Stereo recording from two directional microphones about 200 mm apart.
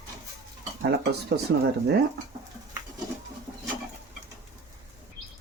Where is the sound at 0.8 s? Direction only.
55° right (ahead or behind).